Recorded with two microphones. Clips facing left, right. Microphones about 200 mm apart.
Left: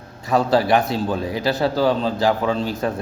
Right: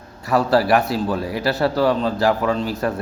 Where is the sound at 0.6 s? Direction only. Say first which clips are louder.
Even; centre (ahead or behind).